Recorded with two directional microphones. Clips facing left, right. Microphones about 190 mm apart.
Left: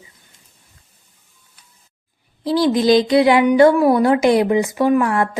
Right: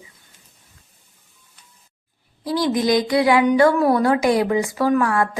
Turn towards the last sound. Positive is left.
turn(degrees=20)  # may be behind; listen again after turning